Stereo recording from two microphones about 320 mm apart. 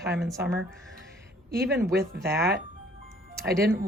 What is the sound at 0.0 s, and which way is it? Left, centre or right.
Speech, right.